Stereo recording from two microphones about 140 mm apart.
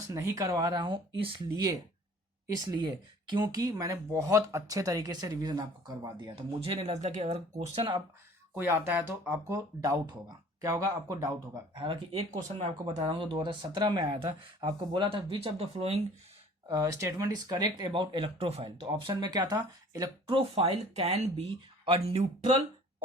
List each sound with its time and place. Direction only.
0.1 s speech: 25° right (ahead or behind)
2.5 s speech: 30° right (ahead or behind)
6.3 s speech: 45° right (ahead or behind)
8.5 s speech: 15° right (ahead or behind); by 16.0 s 45° right (ahead or behind)
16.6 s speech: 25° right (ahead or behind)
20.2 s speech: 40° right (ahead or behind)